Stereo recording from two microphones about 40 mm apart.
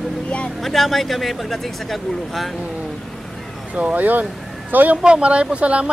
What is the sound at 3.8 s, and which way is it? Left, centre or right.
Speech, right.